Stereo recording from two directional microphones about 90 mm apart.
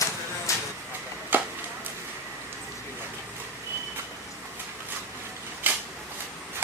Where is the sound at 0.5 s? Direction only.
35° left (ahead or behind).